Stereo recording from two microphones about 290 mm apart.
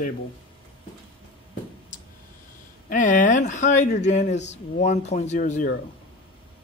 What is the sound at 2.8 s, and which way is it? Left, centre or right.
Speech, left.